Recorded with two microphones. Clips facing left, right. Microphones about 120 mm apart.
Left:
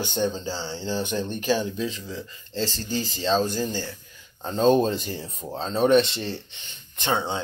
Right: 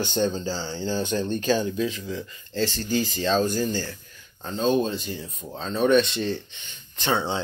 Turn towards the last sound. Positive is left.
turn(degrees=25)  # may be behind; listen again after turning